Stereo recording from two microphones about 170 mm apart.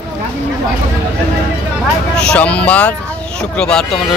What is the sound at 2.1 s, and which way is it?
Speech, 5° left (ahead or behind).